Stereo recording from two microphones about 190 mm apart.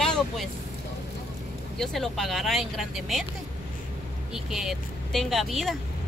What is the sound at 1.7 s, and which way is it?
Speech, centre (ahead or behind).